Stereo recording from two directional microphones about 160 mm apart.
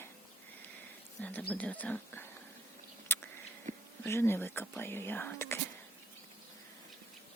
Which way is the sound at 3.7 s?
50° right (ahead or behind).